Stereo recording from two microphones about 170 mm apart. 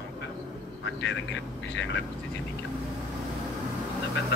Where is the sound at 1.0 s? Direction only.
90° left.